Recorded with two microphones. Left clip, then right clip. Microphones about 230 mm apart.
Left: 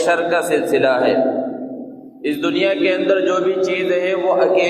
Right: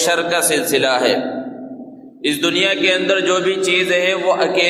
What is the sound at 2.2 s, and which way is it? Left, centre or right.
A man's voice, right.